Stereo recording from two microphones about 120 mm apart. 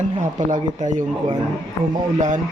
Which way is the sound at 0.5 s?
90° right.